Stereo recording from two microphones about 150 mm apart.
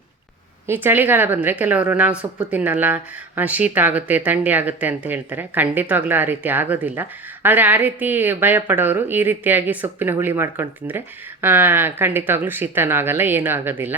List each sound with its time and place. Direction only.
0.7 s a woman's voice: 15° right (ahead or behind)